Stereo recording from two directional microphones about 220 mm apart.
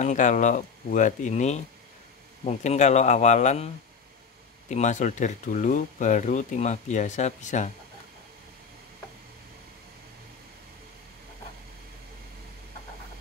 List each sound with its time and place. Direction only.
0.0 s speech: 35° left (ahead or behind)